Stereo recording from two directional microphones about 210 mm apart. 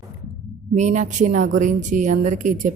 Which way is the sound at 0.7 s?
35° right (ahead or behind).